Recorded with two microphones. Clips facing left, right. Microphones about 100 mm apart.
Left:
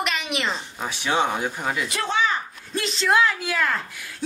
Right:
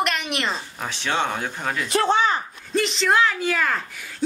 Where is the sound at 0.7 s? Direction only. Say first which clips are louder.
Left 3 dB; 15° left (ahead or behind).